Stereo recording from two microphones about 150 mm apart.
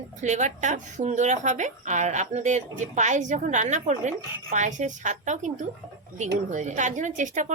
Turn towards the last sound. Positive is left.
turn(degrees=-55)  # may be behind; listen again after turning